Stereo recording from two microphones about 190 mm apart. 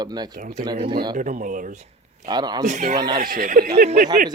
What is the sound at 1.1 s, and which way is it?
Speech, 45° right (ahead or behind).